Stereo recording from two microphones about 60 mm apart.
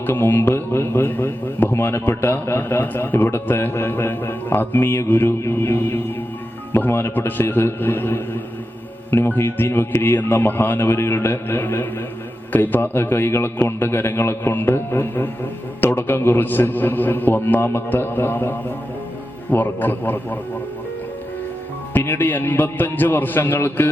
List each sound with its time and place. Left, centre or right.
0.0 s a man's voice: left
21.9 s a man's voice: left